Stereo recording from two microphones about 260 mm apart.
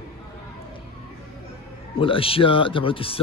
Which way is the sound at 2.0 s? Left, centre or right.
Left.